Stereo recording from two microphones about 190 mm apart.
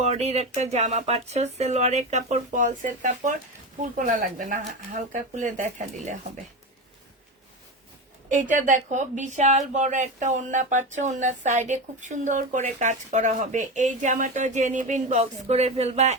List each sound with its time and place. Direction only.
0.0 s speech: 35° right (ahead or behind)
8.3 s speech: 40° right (ahead or behind)